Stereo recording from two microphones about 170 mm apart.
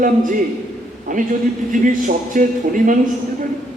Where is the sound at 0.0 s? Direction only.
50° right (ahead or behind).